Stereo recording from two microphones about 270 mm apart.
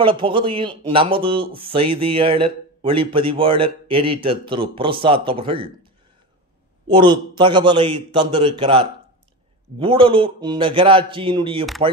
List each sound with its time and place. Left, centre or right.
0.0 s speech: centre
6.9 s a man's voice: centre